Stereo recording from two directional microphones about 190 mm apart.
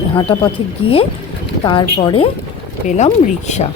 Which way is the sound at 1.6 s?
20° left (ahead or behind).